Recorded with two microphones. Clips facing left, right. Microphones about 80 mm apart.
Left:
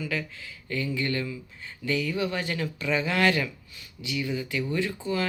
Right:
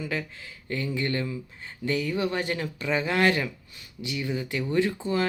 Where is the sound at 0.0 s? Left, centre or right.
Right.